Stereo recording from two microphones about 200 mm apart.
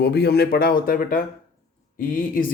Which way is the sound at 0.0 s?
55° left (ahead or behind).